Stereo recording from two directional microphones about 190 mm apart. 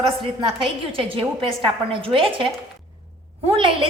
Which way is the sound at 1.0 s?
30° right (ahead or behind).